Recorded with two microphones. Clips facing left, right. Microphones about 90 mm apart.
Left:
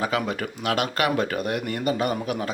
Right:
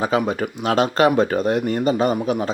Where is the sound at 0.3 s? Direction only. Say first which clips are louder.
Right 5 dB; 25° right (ahead or behind).